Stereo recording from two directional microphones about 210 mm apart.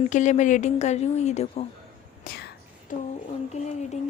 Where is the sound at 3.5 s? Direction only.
35° left (ahead or behind).